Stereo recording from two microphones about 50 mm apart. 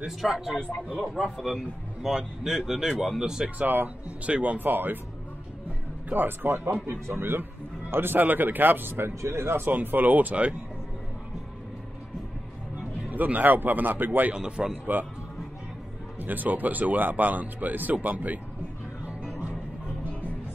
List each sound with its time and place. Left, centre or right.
0.5 s a man's voice: left
1.0 s speech: centre
3.4 s speech: right
6.0 s speech: right
9.7 s speech: right
13.1 s speech: right
14.3 s speech: centre
16.2 s speech: right